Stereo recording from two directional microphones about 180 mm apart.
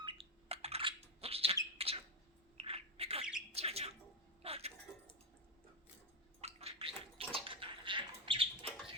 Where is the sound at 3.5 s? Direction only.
35° right (ahead or behind).